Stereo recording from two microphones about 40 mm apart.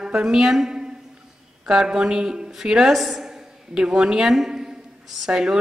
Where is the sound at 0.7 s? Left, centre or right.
Centre.